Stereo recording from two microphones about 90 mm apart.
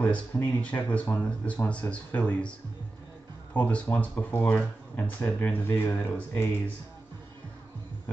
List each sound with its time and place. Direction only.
0.0 s speech: 15° left (ahead or behind)
3.5 s speech: 15° left (ahead or behind)